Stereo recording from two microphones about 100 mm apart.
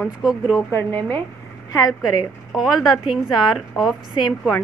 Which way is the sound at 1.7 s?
40° left (ahead or behind).